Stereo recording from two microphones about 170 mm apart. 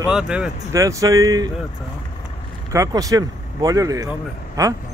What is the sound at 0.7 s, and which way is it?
Speech, 20° right (ahead or behind).